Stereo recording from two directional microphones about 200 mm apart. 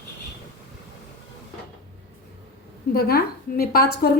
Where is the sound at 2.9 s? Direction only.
50° left (ahead or behind).